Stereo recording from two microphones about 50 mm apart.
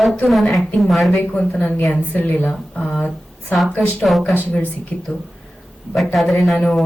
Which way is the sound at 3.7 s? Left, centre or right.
Left.